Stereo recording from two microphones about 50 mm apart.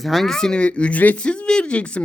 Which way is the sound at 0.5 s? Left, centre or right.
Left.